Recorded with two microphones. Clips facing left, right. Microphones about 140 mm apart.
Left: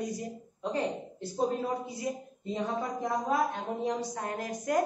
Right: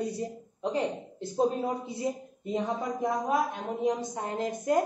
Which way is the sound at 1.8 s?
25° right (ahead or behind).